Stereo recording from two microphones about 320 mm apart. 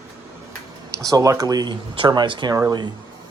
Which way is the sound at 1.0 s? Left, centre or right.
Centre.